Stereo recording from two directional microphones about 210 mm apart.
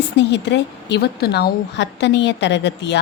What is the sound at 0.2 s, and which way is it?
A woman's voice, 55° left (ahead or behind).